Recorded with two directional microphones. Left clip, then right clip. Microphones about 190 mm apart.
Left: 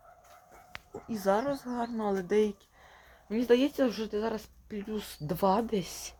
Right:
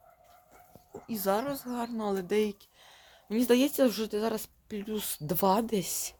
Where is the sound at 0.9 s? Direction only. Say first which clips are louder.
Left 1 dB; centre (ahead or behind).